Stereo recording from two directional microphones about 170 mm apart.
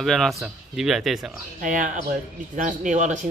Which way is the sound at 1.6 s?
50° right (ahead or behind).